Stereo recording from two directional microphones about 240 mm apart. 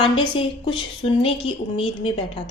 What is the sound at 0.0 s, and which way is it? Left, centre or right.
A woman's voice, left.